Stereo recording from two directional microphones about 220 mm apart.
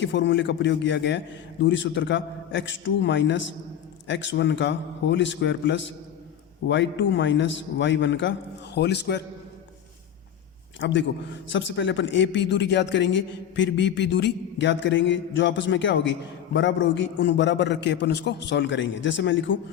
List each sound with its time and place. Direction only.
0.0 s speech: 55° left (ahead or behind)
10.8 s a man's voice: 55° left (ahead or behind)